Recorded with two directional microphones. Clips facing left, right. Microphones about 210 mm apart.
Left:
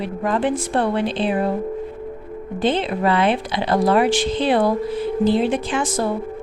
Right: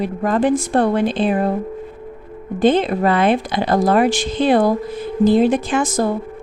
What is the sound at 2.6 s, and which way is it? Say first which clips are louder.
A woman's voice: right 5 dB; 45° right (ahead or behind).